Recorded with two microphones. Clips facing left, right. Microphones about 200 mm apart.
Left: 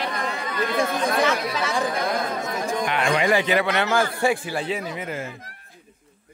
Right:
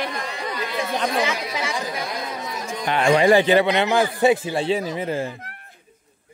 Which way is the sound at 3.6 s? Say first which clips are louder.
Right 3 dB; 15° right (ahead or behind).